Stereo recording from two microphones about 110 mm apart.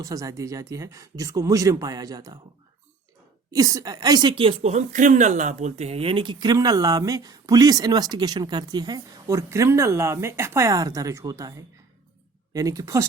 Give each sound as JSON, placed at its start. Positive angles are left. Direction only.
{"t": 0.0, "sound": "speech", "side_deg": -30}
{"t": 3.5, "sound": "speech", "side_deg": -30}
{"t": 4.6, "sound": "speech", "side_deg": -90}